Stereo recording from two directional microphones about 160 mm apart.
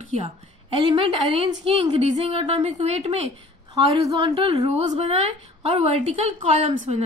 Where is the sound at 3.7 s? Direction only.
20° right (ahead or behind).